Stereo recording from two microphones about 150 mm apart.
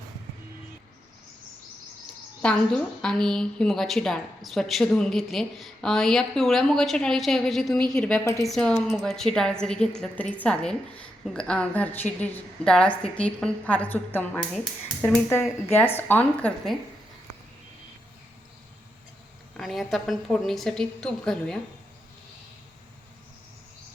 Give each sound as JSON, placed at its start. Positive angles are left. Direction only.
{"t": 2.4, "sound": "a woman's voice", "side_deg": 5}
{"t": 8.2, "sound": "a woman's voice", "side_deg": 20}
{"t": 8.4, "sound": "a woman's voice", "side_deg": 5}
{"t": 19.5, "sound": "a woman's voice", "side_deg": 0}